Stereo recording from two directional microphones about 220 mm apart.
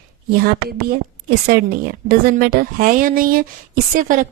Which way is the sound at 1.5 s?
45° right (ahead or behind).